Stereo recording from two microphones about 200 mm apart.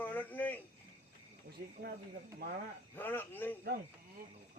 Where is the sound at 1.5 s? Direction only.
55° right (ahead or behind).